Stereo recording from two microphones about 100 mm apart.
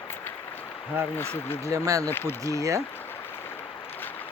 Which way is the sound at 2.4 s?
30° right (ahead or behind).